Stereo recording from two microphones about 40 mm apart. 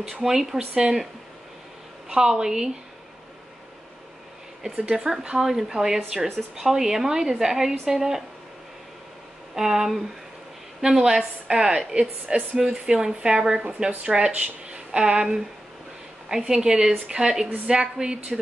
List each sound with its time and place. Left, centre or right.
0.2 s a woman's voice: centre
2.0 s a woman's voice: centre
4.7 s a woman's voice: right
9.6 s a woman's voice: centre
16.3 s a woman's voice: centre